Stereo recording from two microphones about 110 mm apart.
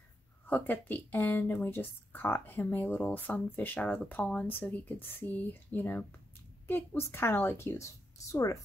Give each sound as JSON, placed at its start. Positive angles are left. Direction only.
{"t": 0.5, "sound": "speech", "side_deg": 15}